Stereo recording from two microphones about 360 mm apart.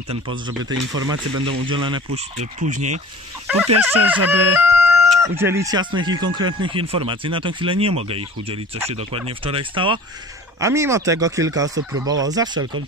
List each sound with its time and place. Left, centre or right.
0.3 s speech: centre
3.8 s speech: centre